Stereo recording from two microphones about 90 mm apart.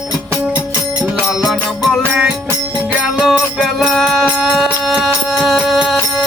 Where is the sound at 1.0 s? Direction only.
5° right (ahead or behind).